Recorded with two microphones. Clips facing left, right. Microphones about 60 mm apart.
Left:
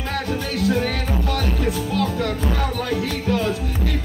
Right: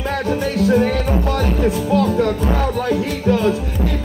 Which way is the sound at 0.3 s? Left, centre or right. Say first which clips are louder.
Right 6 dB; right.